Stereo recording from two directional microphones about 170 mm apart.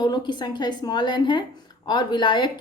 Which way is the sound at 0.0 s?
25° left (ahead or behind).